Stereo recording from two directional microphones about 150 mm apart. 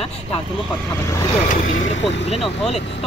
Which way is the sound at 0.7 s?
20° left (ahead or behind).